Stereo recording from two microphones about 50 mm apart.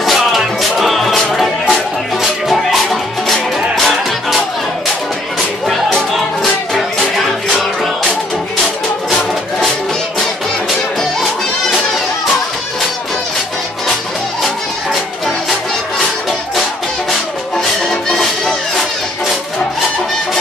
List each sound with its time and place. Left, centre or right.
0.0 s music: centre
5.7 s music: centre
14.4 s music: centre
17.6 s music: centre